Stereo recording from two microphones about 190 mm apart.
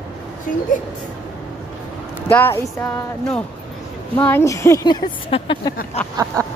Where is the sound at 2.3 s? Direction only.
10° left (ahead or behind).